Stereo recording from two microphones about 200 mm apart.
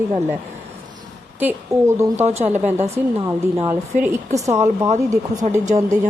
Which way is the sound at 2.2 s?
35° right (ahead or behind).